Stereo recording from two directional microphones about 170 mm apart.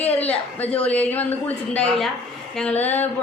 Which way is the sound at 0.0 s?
10° left (ahead or behind).